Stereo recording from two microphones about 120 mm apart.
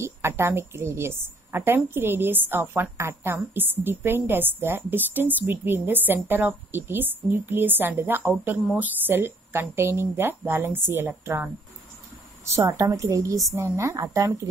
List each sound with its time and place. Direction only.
0.0 s a woman's voice: 20° right (ahead or behind)